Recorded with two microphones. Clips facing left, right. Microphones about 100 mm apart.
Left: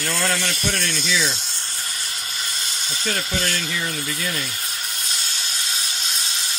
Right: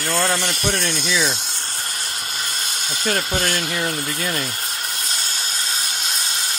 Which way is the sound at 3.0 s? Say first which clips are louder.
Right 4 dB; 45° right (ahead or behind).